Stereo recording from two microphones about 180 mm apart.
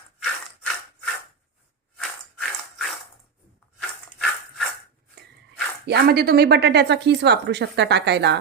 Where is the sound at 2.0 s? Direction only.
Centre (ahead or behind).